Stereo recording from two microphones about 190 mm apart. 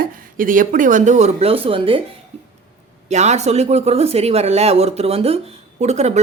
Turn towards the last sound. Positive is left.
turn(degrees=-35)  # may be behind; listen again after turning